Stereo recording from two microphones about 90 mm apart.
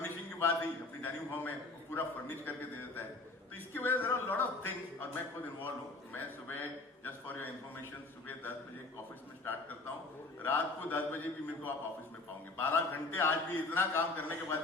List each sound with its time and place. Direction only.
0.0 s a sound: 25° left (ahead or behind)
1.0 s a man's voice: 25° left (ahead or behind)
6.1 s a man's voice: 20° left (ahead or behind)
9.4 s a man's voice: 20° left (ahead or behind)